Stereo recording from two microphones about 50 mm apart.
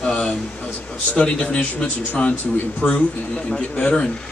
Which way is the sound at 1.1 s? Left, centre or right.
Left.